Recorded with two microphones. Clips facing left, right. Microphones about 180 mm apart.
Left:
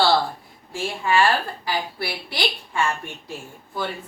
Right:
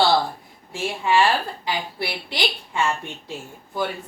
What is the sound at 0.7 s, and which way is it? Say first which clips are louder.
A woman's voice: right 1 dB; 20° right (ahead or behind).